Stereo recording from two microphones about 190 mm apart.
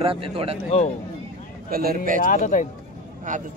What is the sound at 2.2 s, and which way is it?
Speech, 45° left (ahead or behind).